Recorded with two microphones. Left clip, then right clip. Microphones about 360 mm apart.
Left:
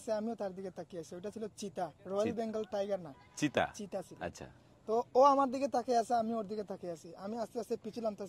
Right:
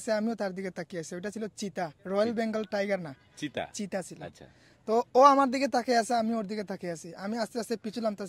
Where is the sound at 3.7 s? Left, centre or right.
Right.